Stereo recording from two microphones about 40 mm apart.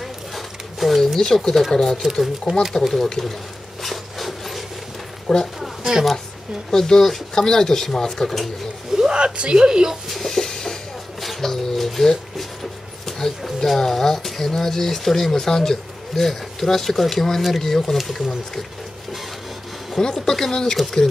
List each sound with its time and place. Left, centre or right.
0.0 s a sound: centre
1.7 s speech: centre
2.5 s speech: right
3.0 s speech: centre
3.8 s wood: centre
5.3 s a woman's voice: centre
6.7 s speech: centre
8.9 s speech: right
10.2 s a sound: centre
11.1 s pigeon: centre
13.0 s speech: centre
20.0 s speech: centre